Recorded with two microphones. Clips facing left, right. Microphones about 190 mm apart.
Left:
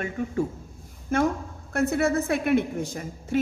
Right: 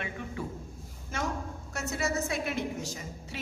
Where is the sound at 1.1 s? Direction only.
55° left (ahead or behind).